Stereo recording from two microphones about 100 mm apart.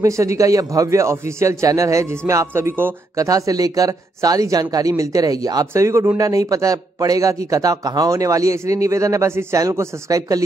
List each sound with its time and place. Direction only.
0.0 s a man's voice: 30° right (ahead or behind)